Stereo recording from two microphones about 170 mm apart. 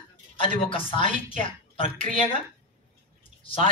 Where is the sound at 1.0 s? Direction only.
45° right (ahead or behind).